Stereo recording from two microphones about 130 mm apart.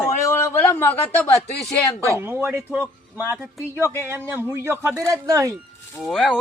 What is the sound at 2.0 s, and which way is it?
Speech, 20° right (ahead or behind).